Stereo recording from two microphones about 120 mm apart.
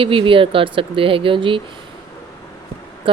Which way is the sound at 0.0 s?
45° right (ahead or behind).